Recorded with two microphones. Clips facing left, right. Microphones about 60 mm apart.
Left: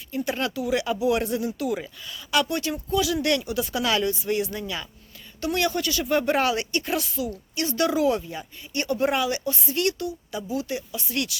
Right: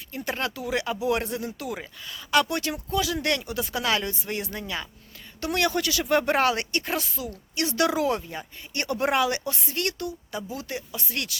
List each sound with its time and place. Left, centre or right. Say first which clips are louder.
0.1 s speech: left 3 dB; right
3.0 s speech: left 3 dB; right
5.4 s speech: even; right
6.9 s speech: left 3 dB; right
7.5 s speech: even; right
8.0 s speech: left 3 dB; right
8.7 s speech: left 1 dB; right
9.7 s speech: left 4 dB; right